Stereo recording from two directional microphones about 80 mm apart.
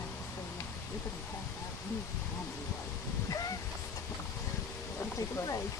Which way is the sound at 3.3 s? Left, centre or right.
Left.